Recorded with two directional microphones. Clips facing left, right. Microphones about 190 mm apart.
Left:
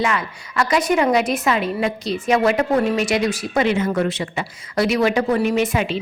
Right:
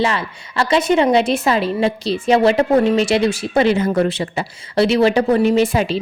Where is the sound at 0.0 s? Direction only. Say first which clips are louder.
Right 2 dB; 30° right (ahead or behind).